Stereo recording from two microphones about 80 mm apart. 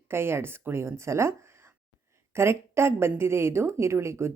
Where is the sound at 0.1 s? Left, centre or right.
Right.